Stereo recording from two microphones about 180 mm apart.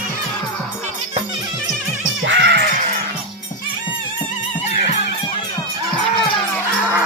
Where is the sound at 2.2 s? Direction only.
85° right.